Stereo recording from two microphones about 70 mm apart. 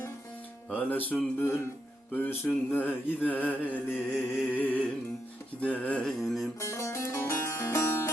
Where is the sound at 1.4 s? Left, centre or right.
Left.